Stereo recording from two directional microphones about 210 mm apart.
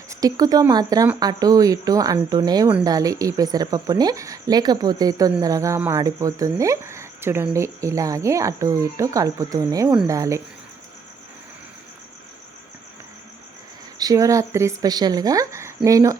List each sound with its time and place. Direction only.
0.1 s speech: 15° right (ahead or behind)
14.0 s speech: 15° right (ahead or behind)